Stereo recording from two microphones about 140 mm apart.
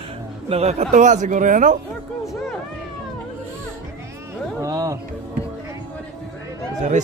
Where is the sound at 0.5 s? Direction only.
50° right (ahead or behind); by 1.8 s 65° right (ahead or behind).